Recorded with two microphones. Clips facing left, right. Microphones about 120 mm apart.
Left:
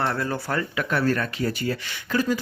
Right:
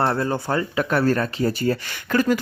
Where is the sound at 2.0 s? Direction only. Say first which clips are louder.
Right 4 dB; 65° right (ahead or behind).